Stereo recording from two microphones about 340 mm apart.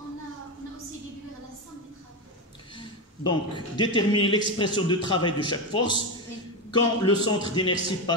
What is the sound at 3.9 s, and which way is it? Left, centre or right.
A man's voice, centre.